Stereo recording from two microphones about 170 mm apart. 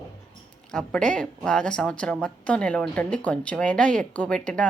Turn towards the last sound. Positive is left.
turn(degrees=5)  # may be behind; listen again after turning